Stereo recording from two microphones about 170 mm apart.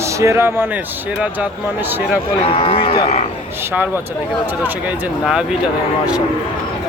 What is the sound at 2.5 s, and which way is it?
Speech, 35° left (ahead or behind).